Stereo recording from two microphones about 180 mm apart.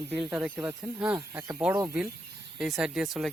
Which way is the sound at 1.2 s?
20° right (ahead or behind).